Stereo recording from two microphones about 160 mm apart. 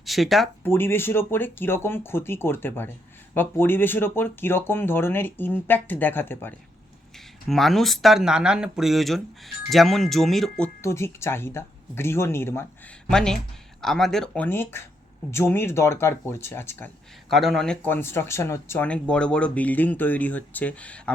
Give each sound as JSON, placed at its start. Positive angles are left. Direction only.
{"t": 0.0, "sound": "speech", "side_deg": 0}
{"t": 0.6, "sound": "speech", "side_deg": 15}
{"t": 7.4, "sound": "speech", "side_deg": 0}
{"t": 10.8, "sound": "speech", "side_deg": 15}
{"t": 13.1, "sound": "speech", "side_deg": 5}
{"t": 17.2, "sound": "speech", "side_deg": 0}